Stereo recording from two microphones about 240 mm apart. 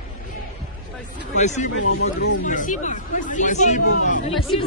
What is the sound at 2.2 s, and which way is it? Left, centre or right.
Speech, left.